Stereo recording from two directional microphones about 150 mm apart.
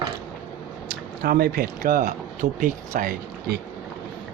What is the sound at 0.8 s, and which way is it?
Speech, 90° right.